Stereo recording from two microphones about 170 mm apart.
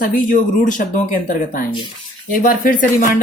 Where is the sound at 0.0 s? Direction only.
50° left (ahead or behind).